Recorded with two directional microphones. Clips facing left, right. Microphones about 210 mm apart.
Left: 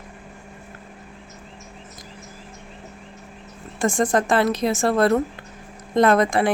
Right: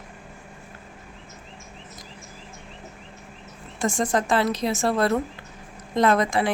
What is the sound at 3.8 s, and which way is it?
A woman's voice, 55° left (ahead or behind).